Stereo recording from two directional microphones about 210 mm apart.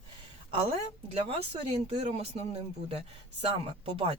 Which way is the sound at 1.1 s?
30° right (ahead or behind).